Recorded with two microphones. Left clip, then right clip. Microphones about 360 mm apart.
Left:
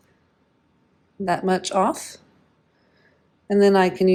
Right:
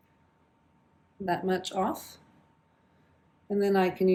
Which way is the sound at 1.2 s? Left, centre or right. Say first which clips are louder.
Left 7 dB; centre.